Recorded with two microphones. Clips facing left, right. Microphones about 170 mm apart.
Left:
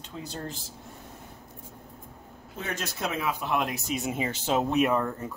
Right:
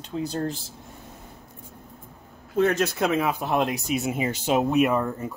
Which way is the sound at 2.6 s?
70° right (ahead or behind).